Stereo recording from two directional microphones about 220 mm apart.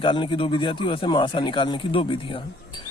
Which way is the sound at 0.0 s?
20° left (ahead or behind).